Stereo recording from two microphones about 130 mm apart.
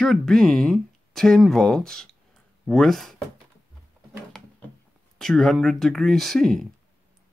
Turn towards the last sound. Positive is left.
turn(degrees=5)  # may be behind; listen again after turning